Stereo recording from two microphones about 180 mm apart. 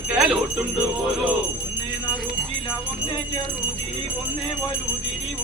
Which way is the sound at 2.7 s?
25° left (ahead or behind).